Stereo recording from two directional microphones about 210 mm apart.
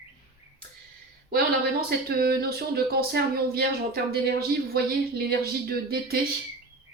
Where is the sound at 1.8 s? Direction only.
45° right (ahead or behind).